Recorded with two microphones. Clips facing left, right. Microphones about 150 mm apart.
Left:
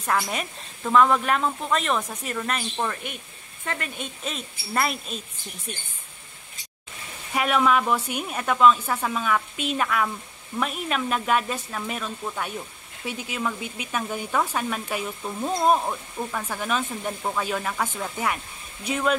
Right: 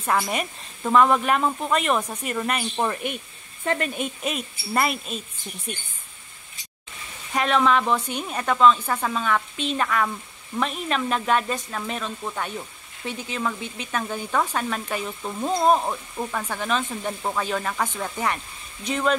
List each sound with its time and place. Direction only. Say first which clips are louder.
0.0 s a woman's voice: right 2 dB; 5° right (ahead or behind)
2.8 s speech: right 4 dB; 20° right (ahead or behind)
4.0 s a woman's voice: right 5 dB; 10° right (ahead or behind)
7.3 s a woman's voice: right 1 dB; 10° left (ahead or behind)